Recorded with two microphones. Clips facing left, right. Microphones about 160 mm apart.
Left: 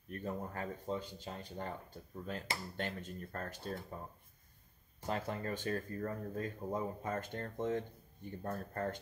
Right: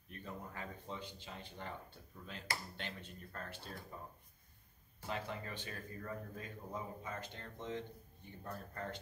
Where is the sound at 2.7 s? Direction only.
45° left (ahead or behind).